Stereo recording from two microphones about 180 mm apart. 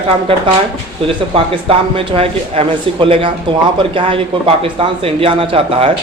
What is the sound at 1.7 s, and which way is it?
A man's voice, 30° right (ahead or behind).